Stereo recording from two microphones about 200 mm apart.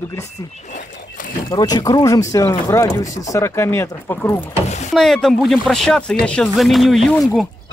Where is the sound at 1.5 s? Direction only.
20° left (ahead or behind).